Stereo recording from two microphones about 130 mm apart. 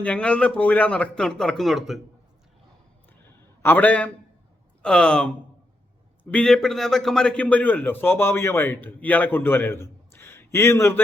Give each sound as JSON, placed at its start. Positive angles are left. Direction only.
{"t": 0.0, "sound": "a man's voice", "side_deg": 10}
{"t": 3.6, "sound": "a man's voice", "side_deg": 15}